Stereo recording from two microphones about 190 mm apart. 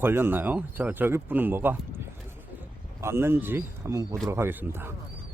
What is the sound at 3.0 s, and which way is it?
Speech, 15° right (ahead or behind).